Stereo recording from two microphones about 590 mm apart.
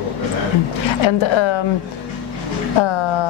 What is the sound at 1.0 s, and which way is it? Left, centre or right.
Speech, left.